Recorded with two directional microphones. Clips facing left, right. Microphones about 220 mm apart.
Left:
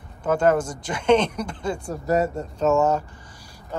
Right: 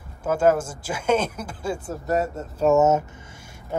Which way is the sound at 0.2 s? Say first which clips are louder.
Even; 5° right (ahead or behind).